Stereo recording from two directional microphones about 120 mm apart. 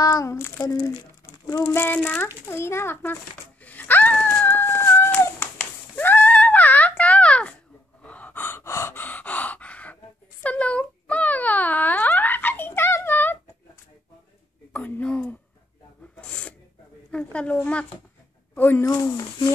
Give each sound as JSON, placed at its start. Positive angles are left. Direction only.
{"t": 0.0, "sound": "speech", "side_deg": 30}
{"t": 3.6, "sound": "wail", "side_deg": 15}
{"t": 8.0, "sound": "gasp", "side_deg": 10}
{"t": 10.4, "sound": "wail", "side_deg": 10}
{"t": 14.7, "sound": "a sound", "side_deg": 15}
{"t": 16.2, "sound": "filing", "side_deg": 10}
{"t": 17.1, "sound": "a woman's voice", "side_deg": 10}